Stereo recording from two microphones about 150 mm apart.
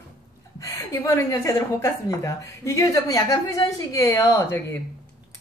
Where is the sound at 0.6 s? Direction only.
20° left (ahead or behind).